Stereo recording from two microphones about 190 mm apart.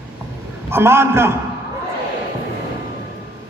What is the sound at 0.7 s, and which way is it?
Speech, 15° right (ahead or behind).